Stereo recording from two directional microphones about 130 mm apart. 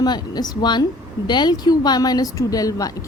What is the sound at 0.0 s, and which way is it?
Speech, 30° left (ahead or behind).